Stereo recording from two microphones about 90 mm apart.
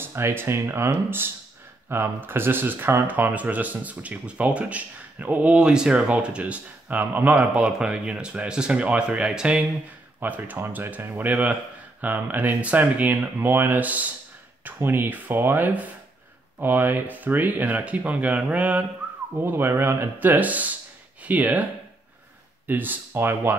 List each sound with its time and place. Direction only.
0.0 s speech: 25° right (ahead or behind)
22.7 s speech: 20° right (ahead or behind)